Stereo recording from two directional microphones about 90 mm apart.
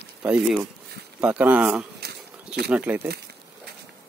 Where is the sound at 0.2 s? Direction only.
15° right (ahead or behind).